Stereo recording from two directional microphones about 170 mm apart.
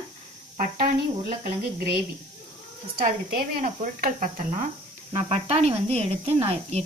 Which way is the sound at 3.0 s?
55° right (ahead or behind).